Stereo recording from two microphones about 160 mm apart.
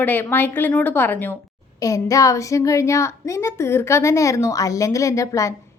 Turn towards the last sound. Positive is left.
turn(degrees=20)  # may be behind; listen again after turning